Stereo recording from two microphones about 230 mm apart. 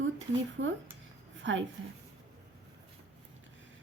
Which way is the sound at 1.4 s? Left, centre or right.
Right.